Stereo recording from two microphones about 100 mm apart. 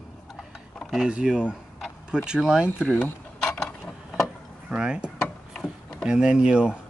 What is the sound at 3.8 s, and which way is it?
Vehicle, 5° right (ahead or behind).